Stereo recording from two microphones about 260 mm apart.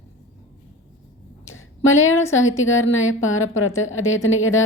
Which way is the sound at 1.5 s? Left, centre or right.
Left.